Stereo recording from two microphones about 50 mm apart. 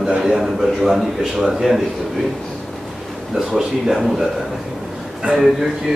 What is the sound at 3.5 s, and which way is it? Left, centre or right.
Speech, centre.